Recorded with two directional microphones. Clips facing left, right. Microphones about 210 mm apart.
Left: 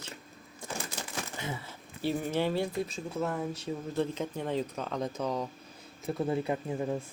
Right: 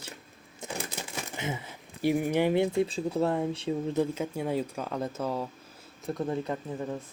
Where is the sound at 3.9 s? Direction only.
10° right (ahead or behind).